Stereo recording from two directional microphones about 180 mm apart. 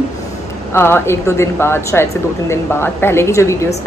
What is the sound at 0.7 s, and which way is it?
A woman's voice, 15° left (ahead or behind).